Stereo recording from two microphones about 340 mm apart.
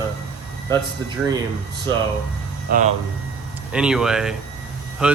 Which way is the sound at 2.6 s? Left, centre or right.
Right.